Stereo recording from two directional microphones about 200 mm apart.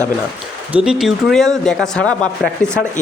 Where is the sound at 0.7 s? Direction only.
5° right (ahead or behind).